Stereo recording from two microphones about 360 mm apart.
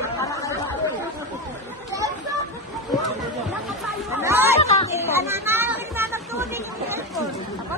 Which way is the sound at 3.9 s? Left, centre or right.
Centre.